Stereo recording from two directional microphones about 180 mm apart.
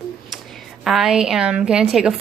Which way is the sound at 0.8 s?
Centre (ahead or behind).